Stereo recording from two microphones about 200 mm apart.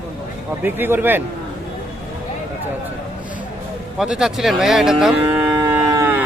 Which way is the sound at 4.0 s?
5° right (ahead or behind).